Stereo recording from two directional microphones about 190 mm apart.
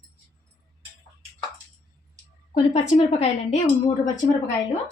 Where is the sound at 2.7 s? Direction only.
35° left (ahead or behind).